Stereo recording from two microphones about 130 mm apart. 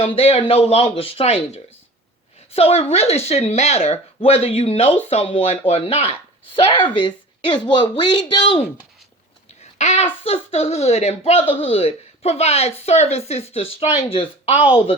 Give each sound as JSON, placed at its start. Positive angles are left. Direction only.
{"t": 0.0, "sound": "a woman's voice", "side_deg": 50}
{"t": 9.7, "sound": "speech", "side_deg": 55}